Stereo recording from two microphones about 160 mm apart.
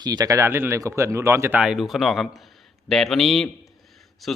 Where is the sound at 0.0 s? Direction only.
25° right (ahead or behind).